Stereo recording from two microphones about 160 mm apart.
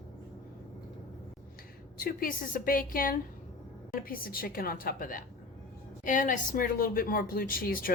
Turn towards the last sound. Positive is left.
turn(degrees=65)  # may be behind; listen again after turning